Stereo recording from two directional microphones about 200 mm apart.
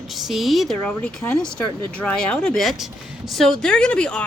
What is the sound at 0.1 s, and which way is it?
Speech, centre (ahead or behind).